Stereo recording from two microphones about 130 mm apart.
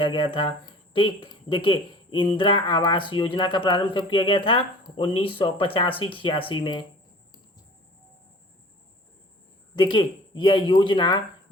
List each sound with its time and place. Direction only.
0.0 s speech: 40° left (ahead or behind)
9.7 s speech: 35° left (ahead or behind)